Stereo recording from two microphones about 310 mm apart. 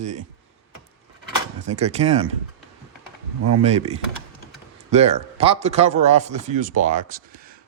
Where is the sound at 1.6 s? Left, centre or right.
Right.